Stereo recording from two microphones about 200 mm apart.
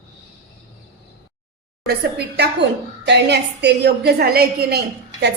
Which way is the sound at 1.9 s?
55° right (ahead or behind).